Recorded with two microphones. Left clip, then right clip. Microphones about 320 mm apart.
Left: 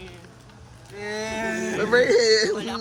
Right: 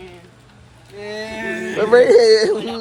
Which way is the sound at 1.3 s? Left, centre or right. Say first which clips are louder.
Right 2 dB; centre.